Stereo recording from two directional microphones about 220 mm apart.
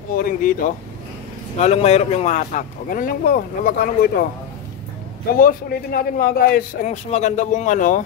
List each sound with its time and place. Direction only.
0.1 s a man's voice: 40° left (ahead or behind)
5.3 s a man's voice: 40° left (ahead or behind)